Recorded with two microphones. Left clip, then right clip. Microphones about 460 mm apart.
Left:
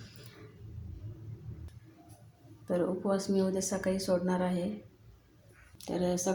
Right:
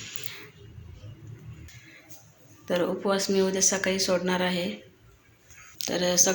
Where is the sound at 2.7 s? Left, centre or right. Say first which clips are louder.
Right 5 dB; left.